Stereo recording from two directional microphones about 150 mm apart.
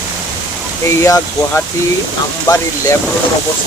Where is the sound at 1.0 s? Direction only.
20° left (ahead or behind).